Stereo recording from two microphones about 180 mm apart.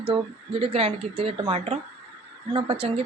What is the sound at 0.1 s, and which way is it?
A woman's voice, 30° right (ahead or behind).